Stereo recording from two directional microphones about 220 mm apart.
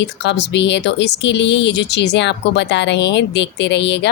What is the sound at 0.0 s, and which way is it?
Speech, 50° left (ahead or behind).